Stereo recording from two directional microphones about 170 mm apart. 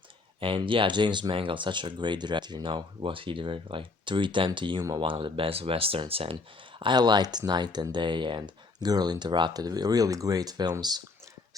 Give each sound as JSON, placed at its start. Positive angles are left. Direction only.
{"t": 0.3, "sound": "speech", "side_deg": -30}